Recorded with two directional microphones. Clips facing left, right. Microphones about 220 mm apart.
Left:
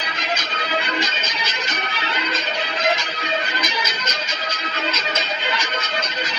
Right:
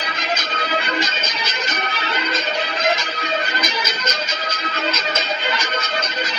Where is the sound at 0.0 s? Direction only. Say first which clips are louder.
Right 2 dB; 45° right (ahead or behind).